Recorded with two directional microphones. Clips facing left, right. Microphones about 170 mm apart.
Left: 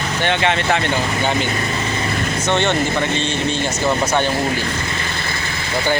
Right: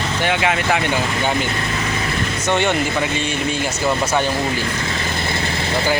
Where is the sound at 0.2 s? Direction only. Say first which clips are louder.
Left 1 dB; 5° right (ahead or behind).